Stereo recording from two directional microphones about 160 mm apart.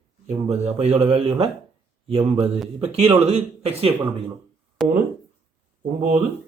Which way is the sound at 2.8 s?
40° right (ahead or behind).